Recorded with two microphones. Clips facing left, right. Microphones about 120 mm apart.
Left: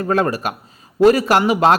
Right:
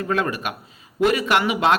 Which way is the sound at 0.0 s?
40° left (ahead or behind).